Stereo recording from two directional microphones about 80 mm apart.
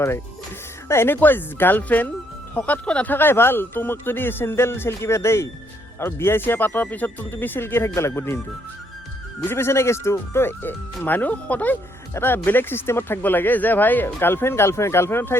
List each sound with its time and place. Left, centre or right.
0.9 s speech: left
9.5 s speech: left